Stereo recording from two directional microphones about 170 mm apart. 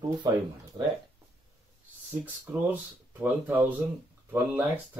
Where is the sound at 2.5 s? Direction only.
10° right (ahead or behind).